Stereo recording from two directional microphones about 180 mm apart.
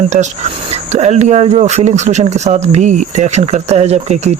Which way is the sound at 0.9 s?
40° right (ahead or behind).